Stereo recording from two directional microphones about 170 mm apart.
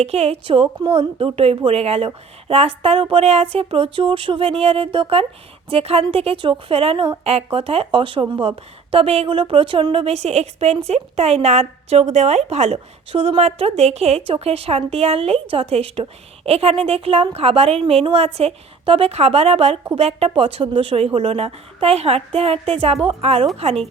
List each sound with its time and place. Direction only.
0.0 s a woman's voice: 40° right (ahead or behind)